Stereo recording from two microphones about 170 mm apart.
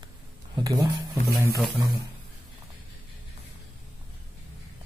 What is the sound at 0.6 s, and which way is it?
Speech, 25° right (ahead or behind).